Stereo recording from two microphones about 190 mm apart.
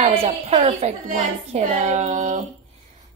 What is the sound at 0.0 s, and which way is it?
A woman's voice, 35° right (ahead or behind).